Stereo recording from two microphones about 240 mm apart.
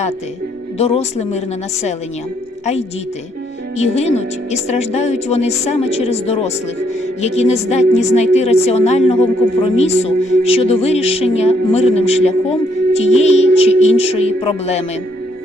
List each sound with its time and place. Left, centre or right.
0.8 s speech: left
3.8 s speech: left